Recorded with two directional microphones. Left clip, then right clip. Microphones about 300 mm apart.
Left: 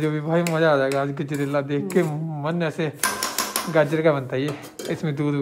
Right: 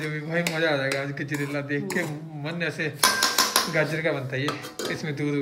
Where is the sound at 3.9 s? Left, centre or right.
Left.